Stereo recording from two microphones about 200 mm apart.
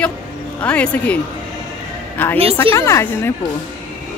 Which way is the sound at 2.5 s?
15° left (ahead or behind).